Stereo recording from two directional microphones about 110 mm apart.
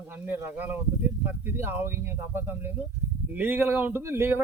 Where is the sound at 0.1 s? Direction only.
20° right (ahead or behind).